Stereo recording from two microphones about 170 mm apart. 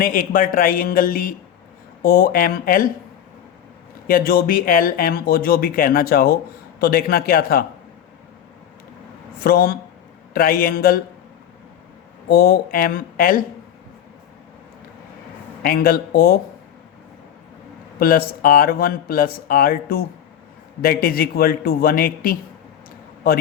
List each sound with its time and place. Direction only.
0.0 s a man's voice: 55° left (ahead or behind)
4.0 s a man's voice: 55° left (ahead or behind)
9.4 s a man's voice: 60° left (ahead or behind)
12.3 s a man's voice: 60° left (ahead or behind)
15.6 s a man's voice: 60° left (ahead or behind)
18.0 s a man's voice: 60° left (ahead or behind)